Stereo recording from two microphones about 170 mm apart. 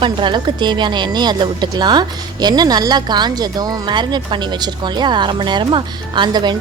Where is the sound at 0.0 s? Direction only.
30° right (ahead or behind).